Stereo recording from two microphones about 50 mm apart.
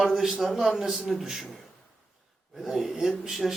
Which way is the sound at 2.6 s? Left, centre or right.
Centre.